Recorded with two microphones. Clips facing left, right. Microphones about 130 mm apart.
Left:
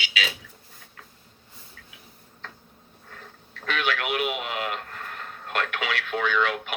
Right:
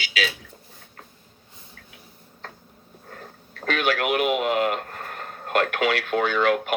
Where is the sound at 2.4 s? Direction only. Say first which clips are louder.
Right 3 dB; 40° right (ahead or behind).